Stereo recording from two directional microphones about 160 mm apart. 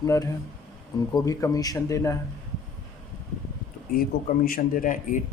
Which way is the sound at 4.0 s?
65° left (ahead or behind).